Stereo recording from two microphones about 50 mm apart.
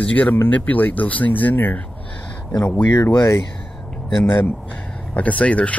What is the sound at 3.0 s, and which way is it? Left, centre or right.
Speech, left.